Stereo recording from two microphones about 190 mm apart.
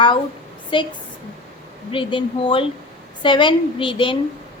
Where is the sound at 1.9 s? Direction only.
25° left (ahead or behind).